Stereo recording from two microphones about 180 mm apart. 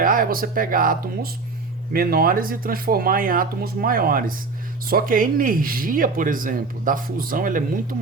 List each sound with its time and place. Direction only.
0.0 s speech: 50° right (ahead or behind)